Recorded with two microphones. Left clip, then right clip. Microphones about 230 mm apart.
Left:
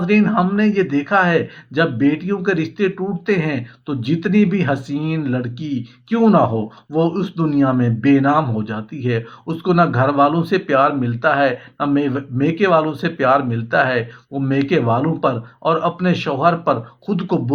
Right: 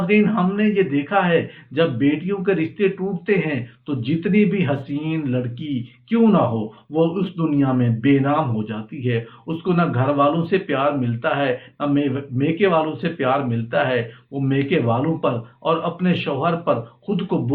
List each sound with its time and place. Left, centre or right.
0.1 s a man's voice: left